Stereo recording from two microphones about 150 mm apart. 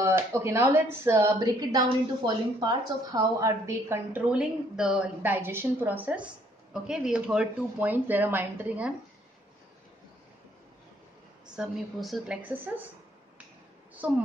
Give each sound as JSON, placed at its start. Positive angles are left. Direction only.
{"t": 0.0, "sound": "speech", "side_deg": -15}
{"t": 11.5, "sound": "a woman's voice", "side_deg": 0}
{"t": 14.0, "sound": "speech", "side_deg": -10}